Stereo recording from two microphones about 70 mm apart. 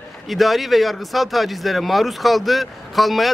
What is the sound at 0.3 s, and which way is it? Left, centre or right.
Speech, centre.